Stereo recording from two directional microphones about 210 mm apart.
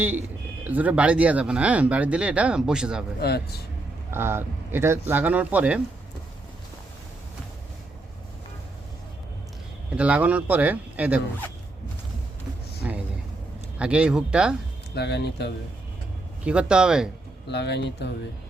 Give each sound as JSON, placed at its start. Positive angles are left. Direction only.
{"t": 0.7, "sound": "speech", "side_deg": -5}
{"t": 3.2, "sound": "speech", "side_deg": 50}
{"t": 4.1, "sound": "speech", "side_deg": -10}
{"t": 9.9, "sound": "speech", "side_deg": -5}
{"t": 12.8, "sound": "a sound", "side_deg": -5}
{"t": 13.7, "sound": "speech", "side_deg": -5}
{"t": 14.9, "sound": "speech", "side_deg": 50}
{"t": 16.4, "sound": "speech", "side_deg": -5}
{"t": 17.5, "sound": "speech", "side_deg": 55}